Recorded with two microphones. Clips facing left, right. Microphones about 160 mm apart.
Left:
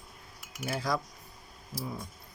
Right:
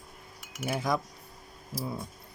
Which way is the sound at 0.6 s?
20° right (ahead or behind).